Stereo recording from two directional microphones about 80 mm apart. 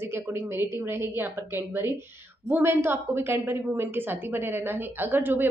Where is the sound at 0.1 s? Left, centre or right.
Right.